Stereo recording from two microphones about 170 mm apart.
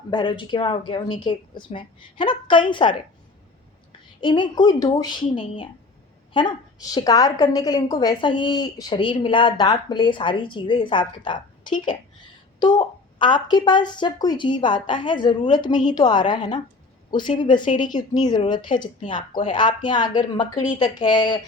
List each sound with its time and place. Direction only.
0.1 s a woman's voice: 30° left (ahead or behind)
4.2 s a woman's voice: 25° left (ahead or behind)